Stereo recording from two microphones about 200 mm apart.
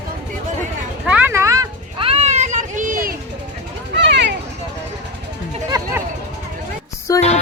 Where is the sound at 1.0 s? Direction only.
5° right (ahead or behind); by 3.1 s 45° right (ahead or behind).